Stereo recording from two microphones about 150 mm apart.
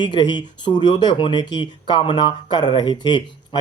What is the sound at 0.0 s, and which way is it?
A man's voice, 30° left (ahead or behind).